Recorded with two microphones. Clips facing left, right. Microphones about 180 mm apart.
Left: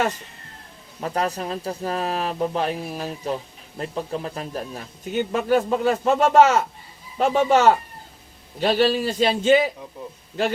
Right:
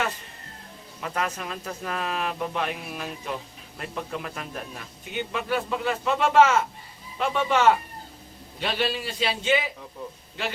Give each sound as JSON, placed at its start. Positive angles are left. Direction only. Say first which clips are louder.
{"t": 1.0, "sound": "a man's voice", "louder": "left 5 dB", "side_deg": 35}